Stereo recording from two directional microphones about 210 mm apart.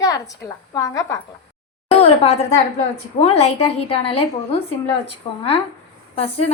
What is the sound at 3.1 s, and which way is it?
A woman's voice, 30° left (ahead or behind).